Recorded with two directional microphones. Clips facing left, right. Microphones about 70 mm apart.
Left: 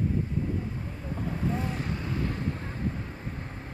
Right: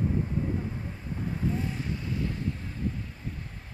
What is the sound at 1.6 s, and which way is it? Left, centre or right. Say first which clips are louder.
Vehicle: left 1 dB; left.